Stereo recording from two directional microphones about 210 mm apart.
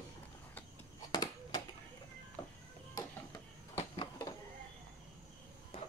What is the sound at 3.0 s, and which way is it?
Music, 15° left (ahead or behind).